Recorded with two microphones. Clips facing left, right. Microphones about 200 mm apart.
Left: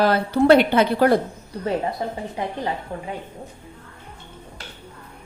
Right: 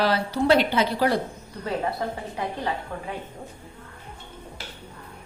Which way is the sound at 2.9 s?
20° left (ahead or behind).